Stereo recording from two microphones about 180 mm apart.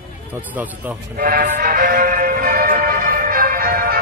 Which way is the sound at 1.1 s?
50° right (ahead or behind).